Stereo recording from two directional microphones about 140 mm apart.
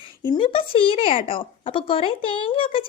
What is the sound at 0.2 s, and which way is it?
A woman's voice, 35° left (ahead or behind).